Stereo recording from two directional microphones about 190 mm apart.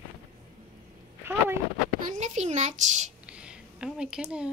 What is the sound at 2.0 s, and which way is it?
A child's voice, 40° right (ahead or behind).